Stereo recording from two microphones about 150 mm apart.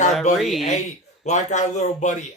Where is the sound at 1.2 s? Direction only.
50° left (ahead or behind).